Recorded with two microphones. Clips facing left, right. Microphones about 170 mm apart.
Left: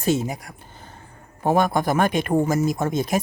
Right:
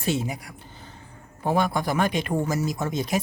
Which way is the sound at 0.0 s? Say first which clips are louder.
Left 4 dB; 45° left (ahead or behind).